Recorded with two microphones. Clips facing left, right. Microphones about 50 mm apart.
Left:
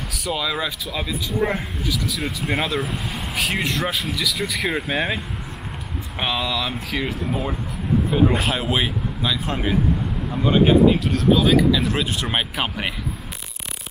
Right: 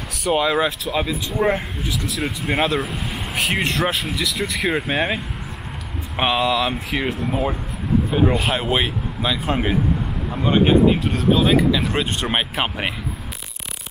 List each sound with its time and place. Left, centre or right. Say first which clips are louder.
0.3 s speech: right 6 dB; right
0.6 s speech: right 6 dB; centre
6.1 s speech: right 5 dB; centre